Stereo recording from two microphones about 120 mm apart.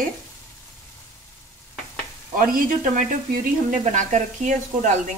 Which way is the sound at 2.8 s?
90° right.